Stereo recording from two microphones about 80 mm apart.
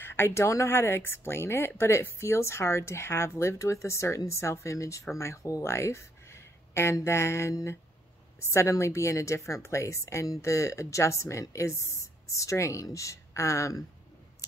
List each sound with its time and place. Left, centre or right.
0.0 s speech: left